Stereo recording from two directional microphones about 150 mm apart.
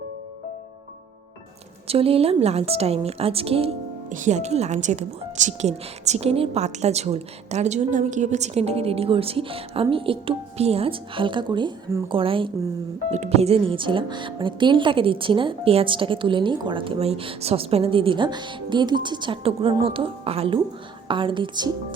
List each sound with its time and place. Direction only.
1.9 s speech: 40° right (ahead or behind)
4.1 s a woman's voice: 55° right (ahead or behind); by 12.5 s 35° right (ahead or behind)
13.1 s speech: 45° right (ahead or behind); by 21.7 s 30° right (ahead or behind)